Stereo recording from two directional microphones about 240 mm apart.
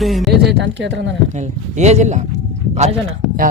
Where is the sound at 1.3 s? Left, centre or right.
Right.